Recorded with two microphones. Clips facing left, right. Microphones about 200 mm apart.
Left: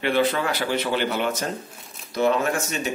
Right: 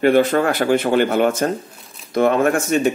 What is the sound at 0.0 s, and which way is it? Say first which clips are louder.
A man's voice: right 7 dB; 45° right (ahead or behind).